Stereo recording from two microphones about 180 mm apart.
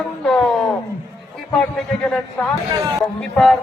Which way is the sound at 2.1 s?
5° left (ahead or behind).